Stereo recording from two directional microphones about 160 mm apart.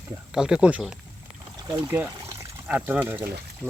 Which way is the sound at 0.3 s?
5° right (ahead or behind).